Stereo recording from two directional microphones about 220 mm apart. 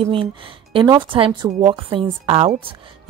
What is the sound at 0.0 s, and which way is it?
A woman's voice, 25° right (ahead or behind).